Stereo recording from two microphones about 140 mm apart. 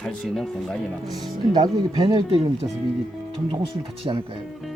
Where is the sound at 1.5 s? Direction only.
30° right (ahead or behind).